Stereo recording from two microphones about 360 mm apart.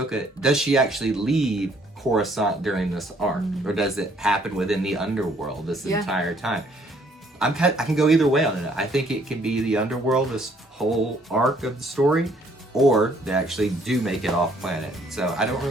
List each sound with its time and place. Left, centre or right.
0.1 s speech: centre